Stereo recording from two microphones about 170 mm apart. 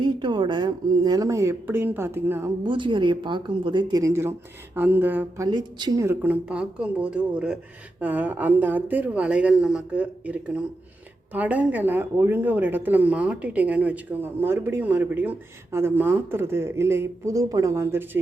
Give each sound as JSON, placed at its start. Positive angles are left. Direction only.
{"t": 0.0, "sound": "speech", "side_deg": -25}
{"t": 2.6, "sound": "speech", "side_deg": -30}
{"t": 5.5, "sound": "speech", "side_deg": -25}
{"t": 6.1, "sound": "speech", "side_deg": -10}